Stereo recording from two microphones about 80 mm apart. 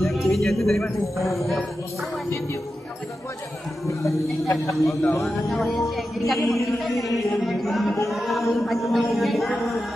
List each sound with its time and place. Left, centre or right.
0.0 s speech: centre
3.8 s speech: left
5.2 s speech: centre